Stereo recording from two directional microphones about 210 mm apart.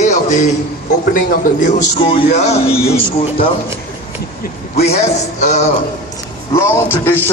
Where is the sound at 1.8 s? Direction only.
25° left (ahead or behind).